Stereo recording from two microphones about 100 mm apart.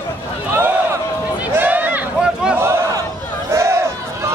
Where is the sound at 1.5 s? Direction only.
20° right (ahead or behind).